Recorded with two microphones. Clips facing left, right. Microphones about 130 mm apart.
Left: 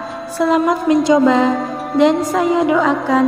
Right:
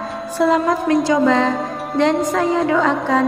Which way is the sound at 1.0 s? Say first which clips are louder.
Left 6 dB; 20° left (ahead or behind).